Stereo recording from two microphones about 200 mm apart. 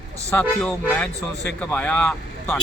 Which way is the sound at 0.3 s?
5° left (ahead or behind).